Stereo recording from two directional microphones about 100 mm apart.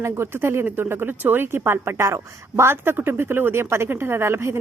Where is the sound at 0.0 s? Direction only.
25° right (ahead or behind).